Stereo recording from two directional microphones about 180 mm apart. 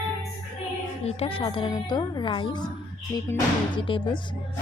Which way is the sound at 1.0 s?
30° left (ahead or behind).